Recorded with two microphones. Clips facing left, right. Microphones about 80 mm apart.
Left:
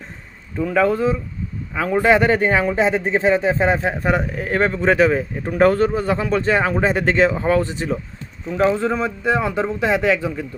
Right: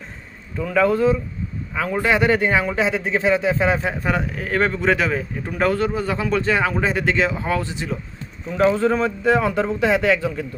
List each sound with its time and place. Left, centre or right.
0.6 s a man's voice: left